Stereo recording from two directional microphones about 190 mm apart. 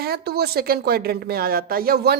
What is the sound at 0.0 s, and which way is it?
Speech, 55° right (ahead or behind).